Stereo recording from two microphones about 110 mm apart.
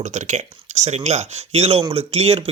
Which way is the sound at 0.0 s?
90° right.